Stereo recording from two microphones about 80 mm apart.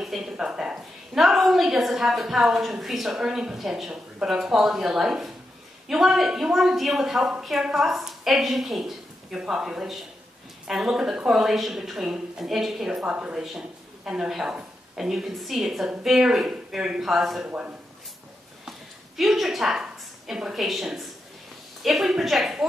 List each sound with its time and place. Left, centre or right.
0.0 s a woman's voice: centre
17.5 s a man's voice: centre
18.7 s a woman's voice: centre